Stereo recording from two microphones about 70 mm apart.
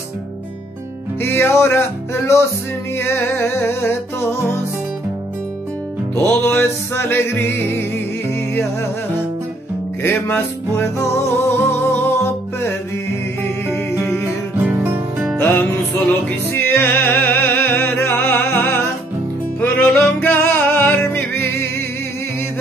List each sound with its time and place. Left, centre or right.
1.2 s music: left
6.5 s music: left
10.0 s music: left
14.6 s music: right
15.3 s music: left